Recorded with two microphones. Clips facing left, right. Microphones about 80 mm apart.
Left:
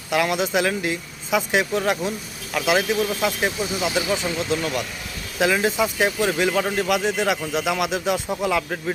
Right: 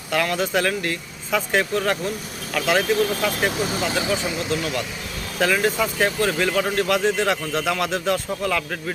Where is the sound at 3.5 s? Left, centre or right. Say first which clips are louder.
Right 2 dB; right.